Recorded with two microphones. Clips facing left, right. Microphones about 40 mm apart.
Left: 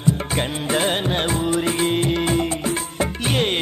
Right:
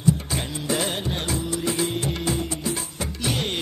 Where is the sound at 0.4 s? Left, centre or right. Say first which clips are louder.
Left 5 dB; left.